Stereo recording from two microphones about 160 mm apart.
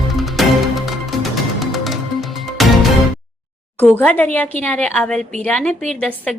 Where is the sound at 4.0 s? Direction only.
10° left (ahead or behind).